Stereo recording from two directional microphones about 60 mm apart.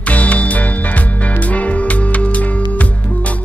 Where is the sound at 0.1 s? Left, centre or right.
Left.